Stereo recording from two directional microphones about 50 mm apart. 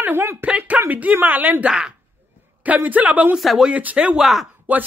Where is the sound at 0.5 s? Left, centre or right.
Right.